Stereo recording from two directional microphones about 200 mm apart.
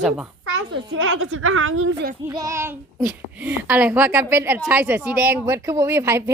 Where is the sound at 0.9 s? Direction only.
90° right.